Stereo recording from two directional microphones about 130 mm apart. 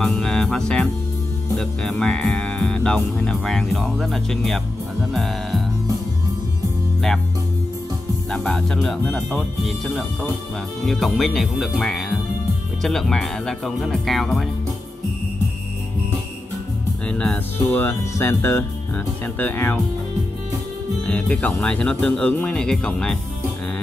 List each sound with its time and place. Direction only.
0.0 s music: 5° left (ahead or behind)
1.6 s speech: 5° left (ahead or behind)
8.3 s speech: 5° left (ahead or behind)
17.1 s speech: 10° left (ahead or behind)
21.0 s speech: 10° left (ahead or behind)